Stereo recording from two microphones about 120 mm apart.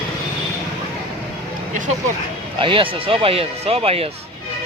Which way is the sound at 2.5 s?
45° right (ahead or behind).